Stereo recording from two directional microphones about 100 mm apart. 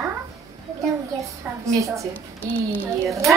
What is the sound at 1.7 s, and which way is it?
Speech, 35° right (ahead or behind).